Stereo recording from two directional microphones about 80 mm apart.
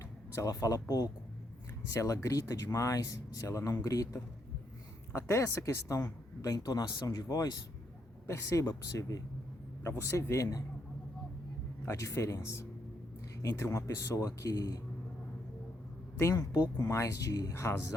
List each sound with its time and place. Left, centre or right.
0.4 s speech: left
11.9 s speech: left
13.4 s speech: left
16.1 s speech: left
17.5 s speech: left